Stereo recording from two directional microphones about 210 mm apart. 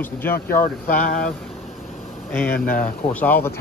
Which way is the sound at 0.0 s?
10° left (ahead or behind).